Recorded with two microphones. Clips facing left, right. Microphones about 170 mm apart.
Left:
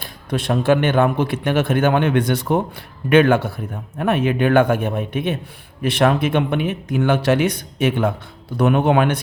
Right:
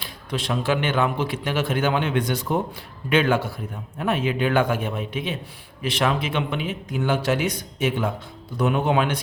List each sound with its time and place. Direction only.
0.0 s speech: 55° left (ahead or behind)